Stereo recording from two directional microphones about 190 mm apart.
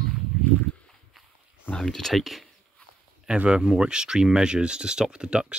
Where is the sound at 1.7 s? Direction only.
Centre (ahead or behind).